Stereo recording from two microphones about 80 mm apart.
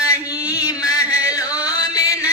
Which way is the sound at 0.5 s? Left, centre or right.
Left.